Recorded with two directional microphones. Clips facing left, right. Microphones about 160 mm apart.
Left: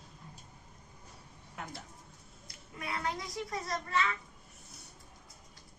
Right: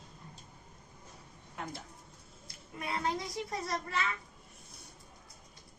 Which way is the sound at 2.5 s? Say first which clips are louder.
Right 2 dB; 30° right (ahead or behind).